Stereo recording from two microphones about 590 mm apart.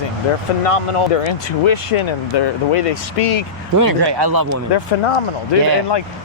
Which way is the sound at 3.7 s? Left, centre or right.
Right.